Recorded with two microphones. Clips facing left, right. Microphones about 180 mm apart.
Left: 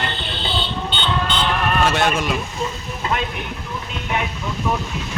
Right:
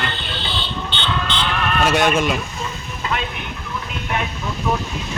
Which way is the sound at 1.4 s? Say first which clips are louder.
Left 2 dB; 40° left (ahead or behind).